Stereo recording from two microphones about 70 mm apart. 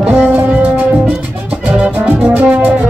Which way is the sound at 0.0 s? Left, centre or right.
Centre.